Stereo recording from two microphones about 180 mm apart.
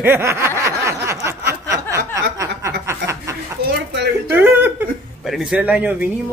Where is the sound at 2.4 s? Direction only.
15° right (ahead or behind).